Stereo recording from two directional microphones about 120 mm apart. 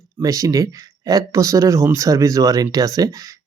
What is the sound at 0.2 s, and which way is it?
Speech, 30° right (ahead or behind).